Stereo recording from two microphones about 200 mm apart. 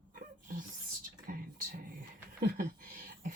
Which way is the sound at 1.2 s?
45° right (ahead or behind).